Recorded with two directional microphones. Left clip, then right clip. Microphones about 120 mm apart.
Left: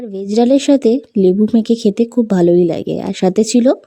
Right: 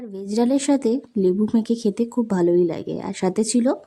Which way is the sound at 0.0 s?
30° left (ahead or behind).